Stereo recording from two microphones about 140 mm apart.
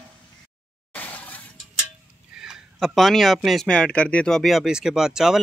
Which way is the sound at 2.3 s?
5° right (ahead or behind).